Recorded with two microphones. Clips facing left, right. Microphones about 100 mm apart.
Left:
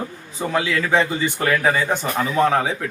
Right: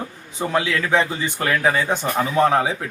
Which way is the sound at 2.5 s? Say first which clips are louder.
Right 1 dB; 10° right (ahead or behind).